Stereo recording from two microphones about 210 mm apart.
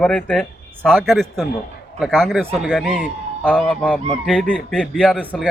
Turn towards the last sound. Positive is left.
turn(degrees=5)  # may be behind; listen again after turning